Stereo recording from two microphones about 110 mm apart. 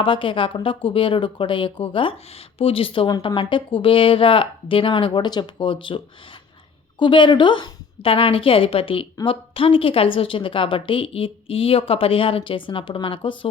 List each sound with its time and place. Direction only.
0.0 s a woman's voice: 50° left (ahead or behind)
7.0 s a woman's voice: 45° left (ahead or behind)